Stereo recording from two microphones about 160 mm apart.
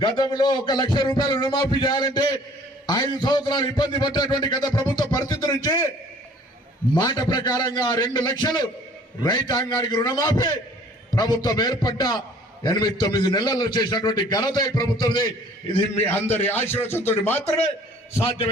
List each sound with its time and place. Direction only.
0.0 s a man's voice: 30° left (ahead or behind)
6.9 s a man's voice: 25° left (ahead or behind)
16.2 s speech: 15° left (ahead or behind)